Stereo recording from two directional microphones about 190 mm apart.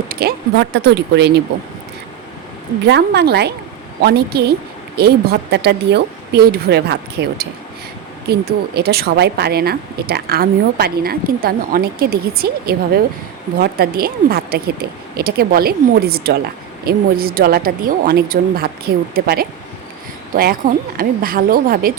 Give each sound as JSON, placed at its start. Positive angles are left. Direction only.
{"t": 0.1, "sound": "a woman's voice", "side_deg": -55}
{"t": 2.8, "sound": "a woman's voice", "side_deg": -60}